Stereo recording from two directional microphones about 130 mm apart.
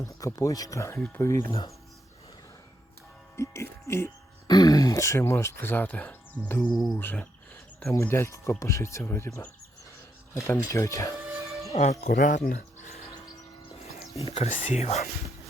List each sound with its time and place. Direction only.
0.0 s speech: 25° left (ahead or behind)
0.9 s cricket: 10° left (ahead or behind)
1.2 s speech: 20° left (ahead or behind)
1.5 s speech: 30° left (ahead or behind)
3.3 s speech: 20° left (ahead or behind)
4.4 s speech: 30° left (ahead or behind); by 6.7 s 10° left (ahead or behind)
6.7 s cricket: centre (ahead or behind)
7.0 s cricket: 15° left (ahead or behind)
7.9 s speech: 20° left (ahead or behind)
11.7 s speech: 60° left (ahead or behind); by 12.4 s 75° left (ahead or behind)
12.8 s a sound: 55° left (ahead or behind)
14.3 s speech: 50° left (ahead or behind)
14.5 s speech: 75° left (ahead or behind); by 15.1 s 55° left (ahead or behind)